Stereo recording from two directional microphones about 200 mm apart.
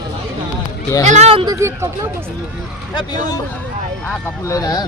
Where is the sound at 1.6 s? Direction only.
15° right (ahead or behind).